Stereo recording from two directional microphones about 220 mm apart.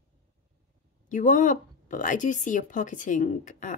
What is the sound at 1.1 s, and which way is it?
Speech, 35° left (ahead or behind).